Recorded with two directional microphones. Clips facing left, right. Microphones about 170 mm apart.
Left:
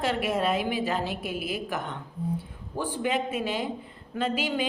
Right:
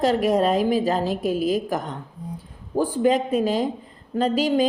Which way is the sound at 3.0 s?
40° right (ahead or behind).